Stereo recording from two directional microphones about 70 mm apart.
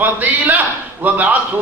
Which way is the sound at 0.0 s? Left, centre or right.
Right.